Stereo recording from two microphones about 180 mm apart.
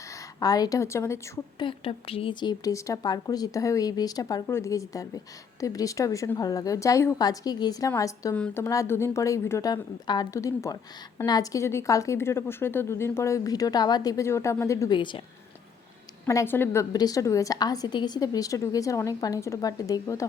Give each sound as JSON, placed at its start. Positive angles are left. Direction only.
{"t": 0.3, "sound": "speech", "side_deg": 20}
{"t": 1.6, "sound": "a woman's voice", "side_deg": 30}
{"t": 16.2, "sound": "speech", "side_deg": 15}